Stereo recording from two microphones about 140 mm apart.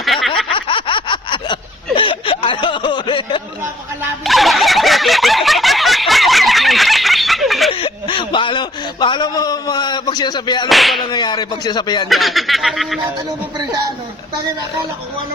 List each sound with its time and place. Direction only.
0.0 s snicker: centre (ahead or behind)
0.5 s a sound: 40° left (ahead or behind)
2.0 s snicker: 35° left (ahead or behind)
4.2 s snicker: centre (ahead or behind)
7.7 s a sound: 40° left (ahead or behind)
10.7 s speech: centre (ahead or behind)
11.0 s speech: 30° left (ahead or behind)
12.0 s speech: centre (ahead or behind)